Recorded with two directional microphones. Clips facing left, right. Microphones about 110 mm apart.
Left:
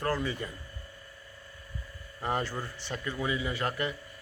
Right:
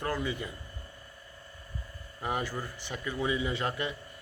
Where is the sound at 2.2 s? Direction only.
10° right (ahead or behind).